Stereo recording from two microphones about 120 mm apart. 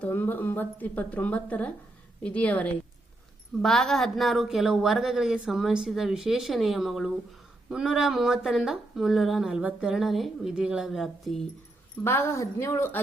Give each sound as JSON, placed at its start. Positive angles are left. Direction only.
{"t": 0.0, "sound": "speech", "side_deg": 15}
{"t": 12.0, "sound": "speech", "side_deg": 20}